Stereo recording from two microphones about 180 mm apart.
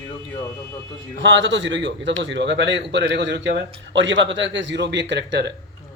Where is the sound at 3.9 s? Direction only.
90° right; by 5.5 s 70° right (ahead or behind).